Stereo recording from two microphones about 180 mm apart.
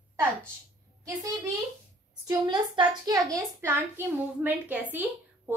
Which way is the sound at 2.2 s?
25° right (ahead or behind).